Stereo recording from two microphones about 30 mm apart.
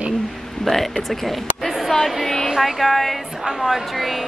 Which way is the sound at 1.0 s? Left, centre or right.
Centre.